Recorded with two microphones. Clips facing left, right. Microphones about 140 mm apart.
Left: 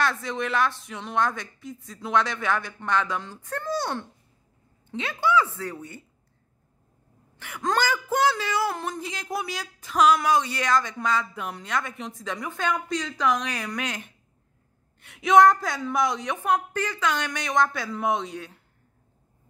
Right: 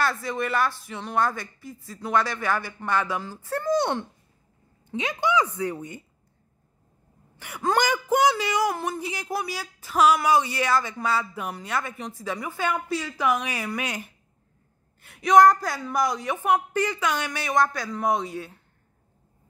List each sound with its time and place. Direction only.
0.0 s speech: 5° right (ahead or behind)
3.7 s a child's voice: 20° right (ahead or behind)
7.3 s speech: 10° right (ahead or behind)